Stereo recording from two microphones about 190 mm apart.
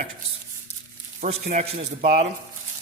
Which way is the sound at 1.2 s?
35° right (ahead or behind).